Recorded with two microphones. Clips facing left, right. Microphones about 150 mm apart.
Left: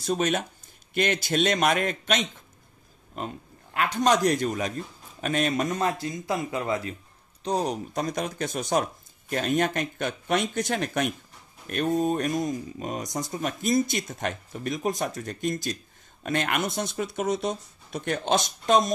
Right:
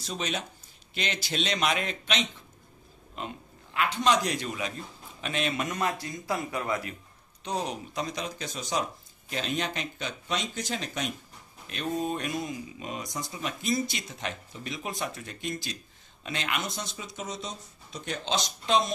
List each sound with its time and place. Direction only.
0.0 s speech: 50° left (ahead or behind); by 7.0 s 30° left (ahead or behind)
7.4 s speech: 40° left (ahead or behind)